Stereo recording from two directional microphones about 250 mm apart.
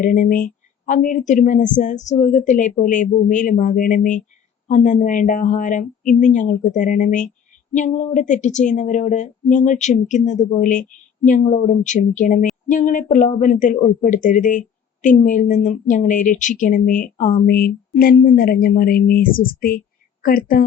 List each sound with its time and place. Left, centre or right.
0.0 s a woman's voice: left